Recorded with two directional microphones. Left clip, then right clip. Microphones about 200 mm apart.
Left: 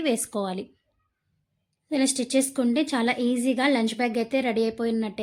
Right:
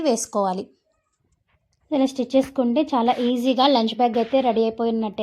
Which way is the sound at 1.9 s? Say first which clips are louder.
Right 4 dB; 5° left (ahead or behind).